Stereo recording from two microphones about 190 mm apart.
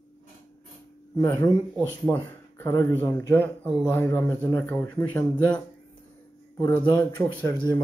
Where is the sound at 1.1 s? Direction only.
20° left (ahead or behind).